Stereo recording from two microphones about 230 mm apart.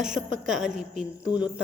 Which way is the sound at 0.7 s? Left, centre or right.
Right.